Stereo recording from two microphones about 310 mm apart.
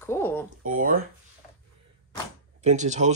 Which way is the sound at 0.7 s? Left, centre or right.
Right.